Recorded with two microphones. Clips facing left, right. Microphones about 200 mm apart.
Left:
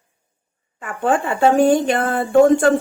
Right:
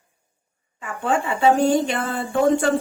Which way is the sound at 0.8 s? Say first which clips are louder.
Left 4 dB; 55° left (ahead or behind).